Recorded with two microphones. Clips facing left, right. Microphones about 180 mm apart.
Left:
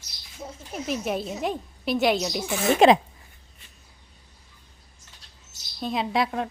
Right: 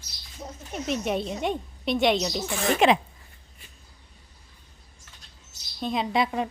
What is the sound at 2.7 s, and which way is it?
Speech, 35° left (ahead or behind).